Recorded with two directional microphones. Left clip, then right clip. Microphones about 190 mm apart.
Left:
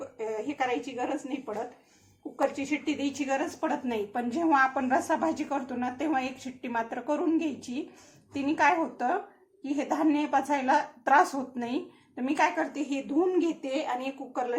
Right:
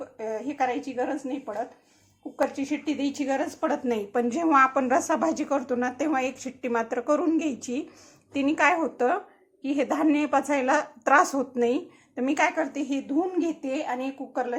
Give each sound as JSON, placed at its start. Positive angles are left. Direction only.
{"t": 0.2, "sound": "a woman's voice", "side_deg": -40}
{"t": 2.6, "sound": "a woman's voice", "side_deg": -40}